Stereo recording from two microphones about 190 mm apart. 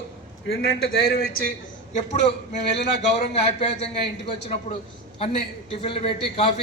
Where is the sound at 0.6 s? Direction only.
55° left (ahead or behind).